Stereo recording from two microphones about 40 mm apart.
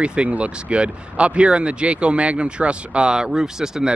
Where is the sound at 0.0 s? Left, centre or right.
Right.